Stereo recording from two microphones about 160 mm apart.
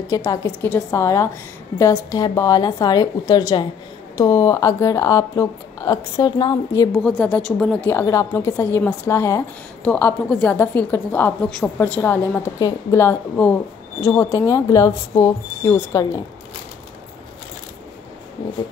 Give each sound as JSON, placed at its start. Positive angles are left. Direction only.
{"t": 0.1, "sound": "speech", "side_deg": 20}
{"t": 6.9, "sound": "a woman's voice", "side_deg": 5}